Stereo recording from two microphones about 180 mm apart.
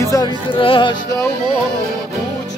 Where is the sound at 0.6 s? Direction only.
30° left (ahead or behind).